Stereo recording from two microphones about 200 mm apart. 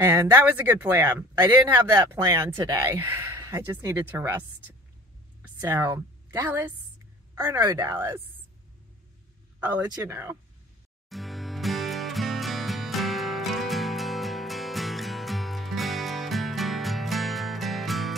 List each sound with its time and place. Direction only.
0.0 s a woman's voice: 15° right (ahead or behind)
9.8 s speech: 15° right (ahead or behind)
11.1 s music: centre (ahead or behind)